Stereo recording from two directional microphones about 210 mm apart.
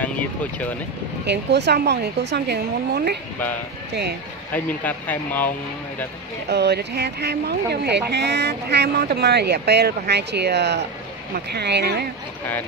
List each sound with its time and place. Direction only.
0.0 s speech: 5° left (ahead or behind)
1.2 s speech: 55° right (ahead or behind)
4.5 s speech: 10° left (ahead or behind)
6.5 s speech: 55° right (ahead or behind)